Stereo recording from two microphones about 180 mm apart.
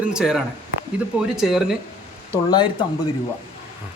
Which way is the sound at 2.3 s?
25° left (ahead or behind).